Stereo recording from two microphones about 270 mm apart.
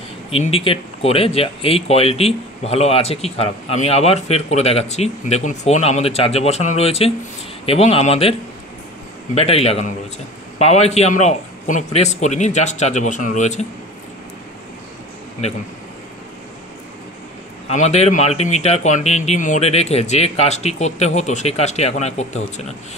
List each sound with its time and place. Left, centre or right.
0.3 s a man's voice: left
15.4 s a man's voice: left
17.6 s a man's voice: left